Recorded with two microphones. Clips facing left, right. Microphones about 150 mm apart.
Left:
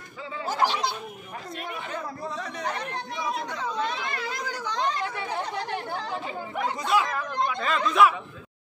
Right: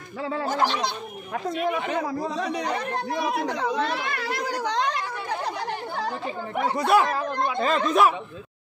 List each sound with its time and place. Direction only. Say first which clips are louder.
0.2 s speech: right 8 dB; 60° right (ahead or behind)
0.5 s speech: left 1 dB; 5° left (ahead or behind)
1.7 s a man's voice: right 6 dB; 80° right
6.5 s speech: right 5 dB; 60° right (ahead or behind)
7.4 s speech: right 6 dB; 25° right (ahead or behind)
7.7 s speech: even; 40° right (ahead or behind)